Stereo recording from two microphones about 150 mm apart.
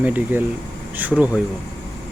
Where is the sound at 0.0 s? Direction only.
10° right (ahead or behind).